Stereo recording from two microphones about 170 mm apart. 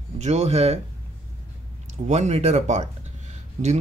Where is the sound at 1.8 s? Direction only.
40° right (ahead or behind).